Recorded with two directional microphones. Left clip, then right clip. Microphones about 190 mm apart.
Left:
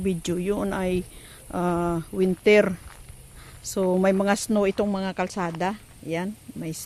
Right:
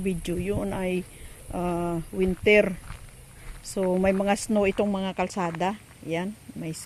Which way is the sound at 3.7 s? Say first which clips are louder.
Left 2 dB; 15° left (ahead or behind).